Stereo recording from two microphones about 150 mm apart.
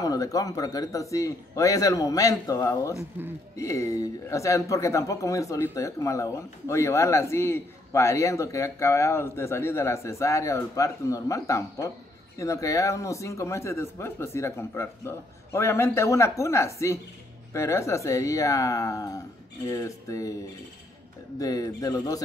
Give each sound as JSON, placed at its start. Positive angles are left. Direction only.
{"t": 0.0, "sound": "speech", "side_deg": 25}
{"t": 3.0, "sound": "a man's voice", "side_deg": -15}
{"t": 3.5, "sound": "speech", "side_deg": 20}
{"t": 21.4, "sound": "speech", "side_deg": 25}